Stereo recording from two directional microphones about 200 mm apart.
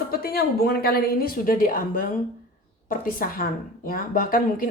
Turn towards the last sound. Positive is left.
turn(degrees=45)  # may be behind; listen again after turning